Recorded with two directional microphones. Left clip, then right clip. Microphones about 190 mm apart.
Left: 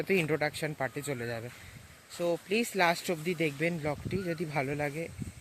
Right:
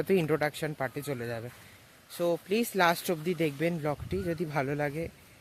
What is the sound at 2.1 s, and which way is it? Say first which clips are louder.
Speech: right 1 dB; 20° right (ahead or behind).